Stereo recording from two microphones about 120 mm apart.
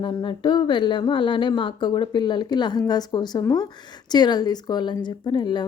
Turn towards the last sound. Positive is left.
turn(degrees=40)  # may be behind; listen again after turning